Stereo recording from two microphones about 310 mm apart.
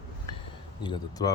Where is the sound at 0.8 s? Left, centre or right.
Centre.